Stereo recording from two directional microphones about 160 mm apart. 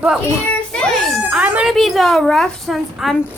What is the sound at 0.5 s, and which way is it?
Child singing, 5° left (ahead or behind).